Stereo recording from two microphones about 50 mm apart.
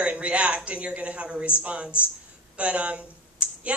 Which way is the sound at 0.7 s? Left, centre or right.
Right.